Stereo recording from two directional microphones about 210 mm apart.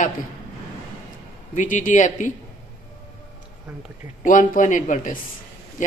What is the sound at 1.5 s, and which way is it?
Speech, 35° left (ahead or behind).